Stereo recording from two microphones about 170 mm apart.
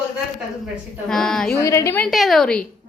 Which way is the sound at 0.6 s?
5° left (ahead or behind).